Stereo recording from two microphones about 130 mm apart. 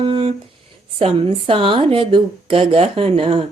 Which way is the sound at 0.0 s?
45° right (ahead or behind).